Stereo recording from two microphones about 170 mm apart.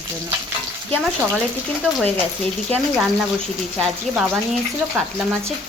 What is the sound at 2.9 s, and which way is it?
Speech, centre (ahead or behind).